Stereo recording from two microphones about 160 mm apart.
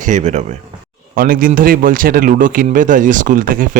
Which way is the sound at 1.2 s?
60° right (ahead or behind).